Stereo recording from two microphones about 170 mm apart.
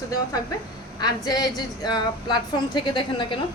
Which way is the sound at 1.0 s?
25° left (ahead or behind).